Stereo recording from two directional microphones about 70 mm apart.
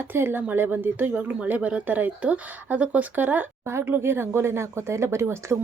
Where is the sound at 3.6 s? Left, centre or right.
Right.